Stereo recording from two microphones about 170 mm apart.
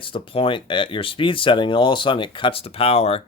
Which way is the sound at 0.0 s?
30° left (ahead or behind).